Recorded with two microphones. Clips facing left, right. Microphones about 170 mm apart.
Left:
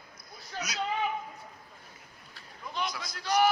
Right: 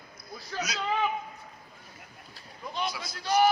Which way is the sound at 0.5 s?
90° right.